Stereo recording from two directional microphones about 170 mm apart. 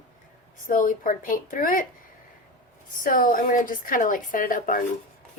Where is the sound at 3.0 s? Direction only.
55° left (ahead or behind).